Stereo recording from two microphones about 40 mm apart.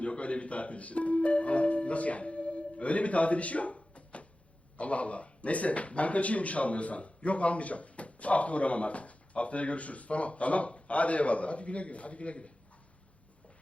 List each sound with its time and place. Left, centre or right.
0.0 s speech: left